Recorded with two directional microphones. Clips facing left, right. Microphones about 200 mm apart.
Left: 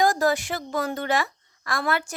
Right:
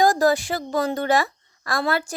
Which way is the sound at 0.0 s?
35° right (ahead or behind).